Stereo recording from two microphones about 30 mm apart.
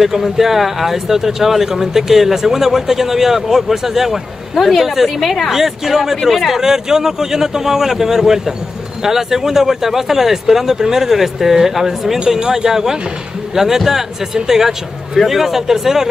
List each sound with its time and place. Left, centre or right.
0.0 s speech: centre